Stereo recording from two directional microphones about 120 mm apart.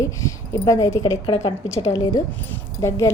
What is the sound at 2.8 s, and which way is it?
Speech, 25° left (ahead or behind).